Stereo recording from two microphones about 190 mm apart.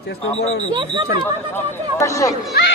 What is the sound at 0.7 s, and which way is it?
Speech, 25° right (ahead or behind).